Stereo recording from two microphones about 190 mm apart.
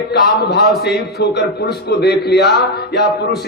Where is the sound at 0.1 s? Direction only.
60° left (ahead or behind).